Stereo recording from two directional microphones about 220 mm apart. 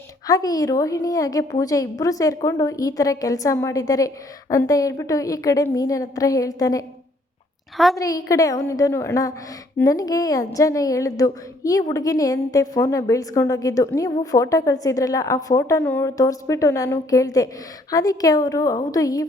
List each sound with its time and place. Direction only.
0.3 s a woman's voice: 15° left (ahead or behind)
7.9 s a woman's voice: 15° left (ahead or behind)